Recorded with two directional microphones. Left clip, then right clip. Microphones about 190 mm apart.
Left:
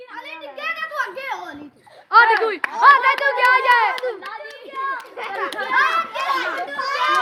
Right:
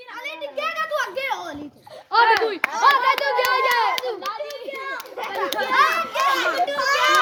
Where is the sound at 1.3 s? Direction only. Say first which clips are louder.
Right 1 dB; 25° right (ahead or behind).